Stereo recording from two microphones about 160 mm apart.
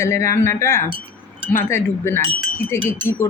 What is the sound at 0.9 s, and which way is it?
Wind chime, 35° right (ahead or behind).